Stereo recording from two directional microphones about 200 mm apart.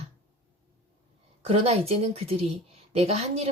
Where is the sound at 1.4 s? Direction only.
30° right (ahead or behind).